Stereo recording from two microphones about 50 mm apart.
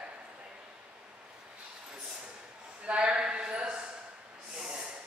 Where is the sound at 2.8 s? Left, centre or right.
Right.